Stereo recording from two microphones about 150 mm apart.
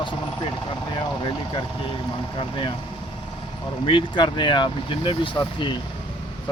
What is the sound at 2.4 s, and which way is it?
Speech, 35° left (ahead or behind).